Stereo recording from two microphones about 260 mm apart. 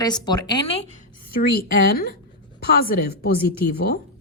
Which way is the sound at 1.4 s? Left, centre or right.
Left.